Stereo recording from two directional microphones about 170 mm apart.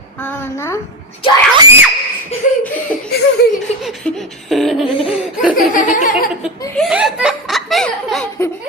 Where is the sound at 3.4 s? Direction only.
70° left (ahead or behind).